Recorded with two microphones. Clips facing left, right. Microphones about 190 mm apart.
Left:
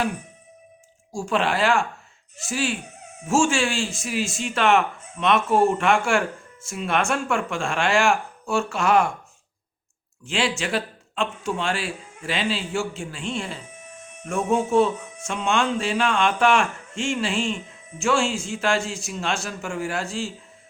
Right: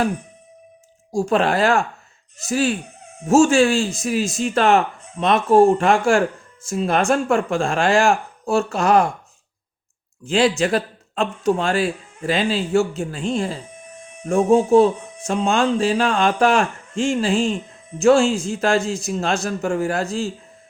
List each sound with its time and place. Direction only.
1.1 s speech: 40° right (ahead or behind)
10.2 s speech: 40° right (ahead or behind)